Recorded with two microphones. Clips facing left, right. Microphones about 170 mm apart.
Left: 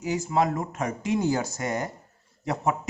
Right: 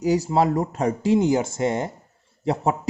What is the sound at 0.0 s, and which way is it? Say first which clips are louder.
A man's voice: right 5 dB; 35° right (ahead or behind).